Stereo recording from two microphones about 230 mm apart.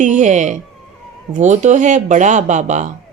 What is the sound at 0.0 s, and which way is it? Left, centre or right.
A woman's voice, right.